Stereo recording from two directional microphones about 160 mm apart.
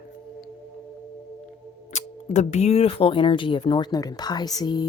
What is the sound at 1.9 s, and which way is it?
Speech, 45° left (ahead or behind).